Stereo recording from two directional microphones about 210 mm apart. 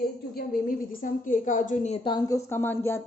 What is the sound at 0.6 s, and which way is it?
A woman's voice, 40° left (ahead or behind).